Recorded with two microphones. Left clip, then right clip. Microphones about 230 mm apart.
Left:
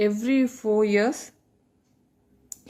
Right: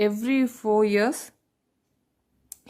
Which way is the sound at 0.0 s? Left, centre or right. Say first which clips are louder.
Left 1 dB; right.